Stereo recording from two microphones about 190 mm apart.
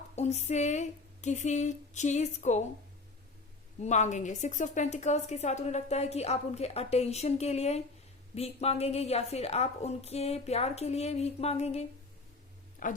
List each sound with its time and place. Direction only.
0.2 s a woman's voice: 35° left (ahead or behind)
3.8 s a woman's voice: 40° left (ahead or behind)